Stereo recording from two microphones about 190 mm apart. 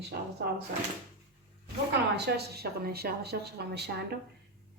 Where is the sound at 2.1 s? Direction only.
60° right (ahead or behind).